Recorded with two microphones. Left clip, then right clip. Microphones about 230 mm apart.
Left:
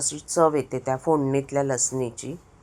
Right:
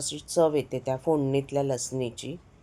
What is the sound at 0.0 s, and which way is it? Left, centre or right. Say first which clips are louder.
Speech: left 3 dB; centre.